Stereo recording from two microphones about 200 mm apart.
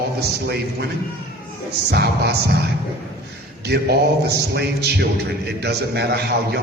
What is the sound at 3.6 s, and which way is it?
A man's voice, 55° right (ahead or behind).